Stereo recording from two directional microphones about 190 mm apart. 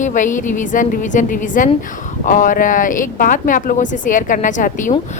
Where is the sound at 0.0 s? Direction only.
40° left (ahead or behind).